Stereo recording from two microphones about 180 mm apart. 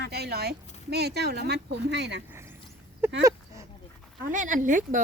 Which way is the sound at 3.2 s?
15° right (ahead or behind).